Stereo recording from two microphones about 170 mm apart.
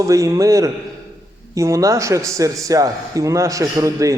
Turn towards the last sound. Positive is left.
turn(degrees=-20)  # may be behind; listen again after turning